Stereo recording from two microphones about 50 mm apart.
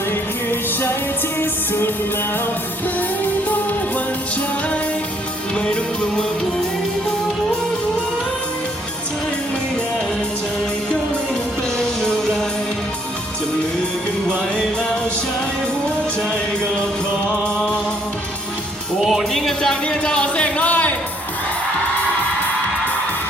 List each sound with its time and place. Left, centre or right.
1.4 s music: left
11.8 s music: centre
19.3 s music: centre
19.9 s a sound: left